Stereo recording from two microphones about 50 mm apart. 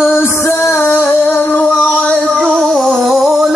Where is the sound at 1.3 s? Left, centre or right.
Left.